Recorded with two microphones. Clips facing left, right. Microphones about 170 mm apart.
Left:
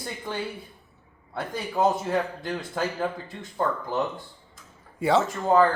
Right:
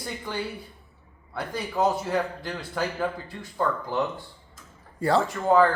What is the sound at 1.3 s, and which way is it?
A man's voice, 20° left (ahead or behind).